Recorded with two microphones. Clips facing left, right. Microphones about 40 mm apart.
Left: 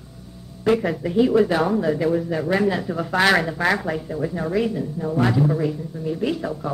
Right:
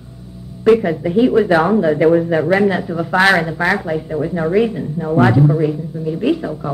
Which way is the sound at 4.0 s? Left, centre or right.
Right.